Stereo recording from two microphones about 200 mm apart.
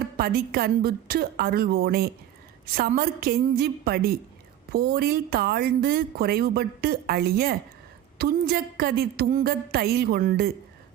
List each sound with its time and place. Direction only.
0.2 s speech: 50° right (ahead or behind)